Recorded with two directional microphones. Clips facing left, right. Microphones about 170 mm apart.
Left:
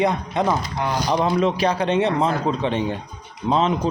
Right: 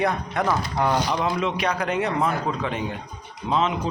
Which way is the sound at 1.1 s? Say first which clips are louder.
Left 5 dB; 35° left (ahead or behind).